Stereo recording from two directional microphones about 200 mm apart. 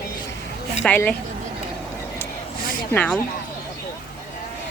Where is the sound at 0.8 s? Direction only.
10° left (ahead or behind).